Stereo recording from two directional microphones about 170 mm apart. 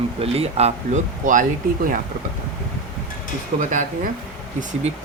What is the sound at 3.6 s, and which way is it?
Speech, 50° right (ahead or behind).